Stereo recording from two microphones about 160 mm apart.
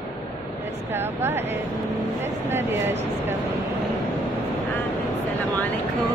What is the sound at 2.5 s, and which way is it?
Speech, 15° right (ahead or behind).